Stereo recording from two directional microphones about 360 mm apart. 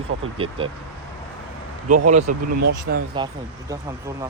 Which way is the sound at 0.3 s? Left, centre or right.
Centre.